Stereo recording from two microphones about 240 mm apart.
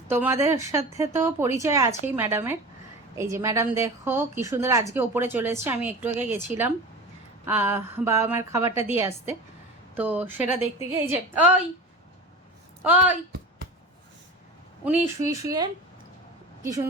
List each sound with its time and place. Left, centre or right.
0.1 s a woman's voice: centre
12.8 s a woman's voice: centre
15.3 s a woman's voice: centre